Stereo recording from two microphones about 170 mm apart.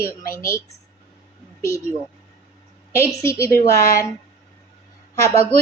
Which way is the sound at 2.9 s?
15° left (ahead or behind).